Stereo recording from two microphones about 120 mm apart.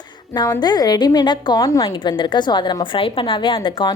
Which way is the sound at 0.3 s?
30° left (ahead or behind).